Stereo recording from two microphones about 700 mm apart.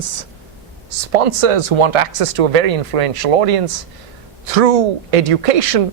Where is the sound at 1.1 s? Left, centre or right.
Right.